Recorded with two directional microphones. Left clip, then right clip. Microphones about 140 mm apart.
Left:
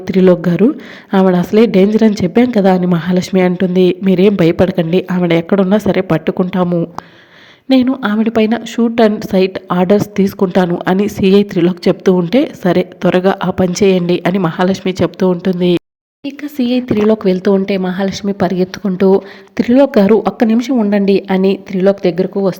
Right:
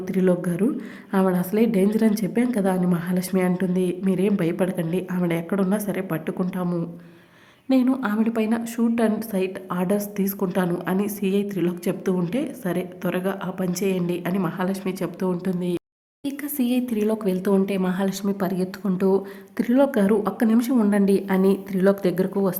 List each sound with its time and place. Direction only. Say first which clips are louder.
0.1 s a woman's voice: left 12 dB; 40° left (ahead or behind)
7.7 s a woman's voice: left 9 dB; 35° left (ahead or behind)
16.2 s speech: left 8 dB; 20° left (ahead or behind)